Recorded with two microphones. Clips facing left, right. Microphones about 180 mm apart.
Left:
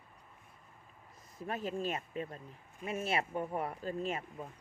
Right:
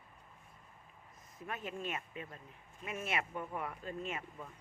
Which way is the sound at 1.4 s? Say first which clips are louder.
Left 5 dB; 35° left (ahead or behind).